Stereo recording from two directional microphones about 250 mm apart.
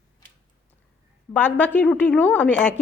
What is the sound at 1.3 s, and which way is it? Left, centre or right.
A woman's voice, centre.